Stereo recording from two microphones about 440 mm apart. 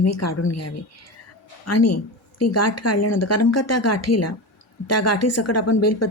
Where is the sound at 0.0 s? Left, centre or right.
Left.